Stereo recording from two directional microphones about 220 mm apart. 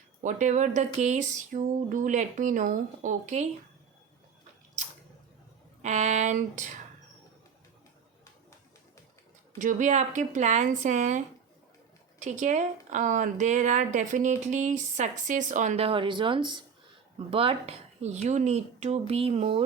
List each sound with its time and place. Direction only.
0.2 s a woman's voice: 35° right (ahead or behind)
5.8 s a woman's voice: 30° right (ahead or behind)
9.6 s a woman's voice: 35° right (ahead or behind)
12.2 s a woman's voice: 35° right (ahead or behind)